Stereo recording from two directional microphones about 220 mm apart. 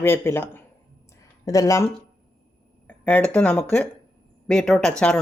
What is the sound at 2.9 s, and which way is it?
Speech, 5° left (ahead or behind).